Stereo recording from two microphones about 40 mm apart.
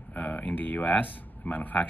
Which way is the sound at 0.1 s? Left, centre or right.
Left.